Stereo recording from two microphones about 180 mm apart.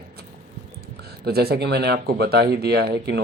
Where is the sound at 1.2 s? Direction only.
60° right (ahead or behind).